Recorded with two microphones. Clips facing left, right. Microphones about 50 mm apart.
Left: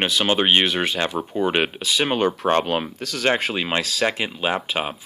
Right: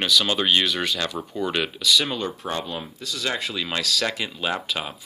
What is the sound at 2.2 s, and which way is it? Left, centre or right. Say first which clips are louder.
Speech: left 9 dB; left.